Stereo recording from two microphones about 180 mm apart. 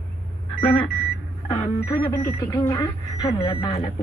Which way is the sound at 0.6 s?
30° left (ahead or behind).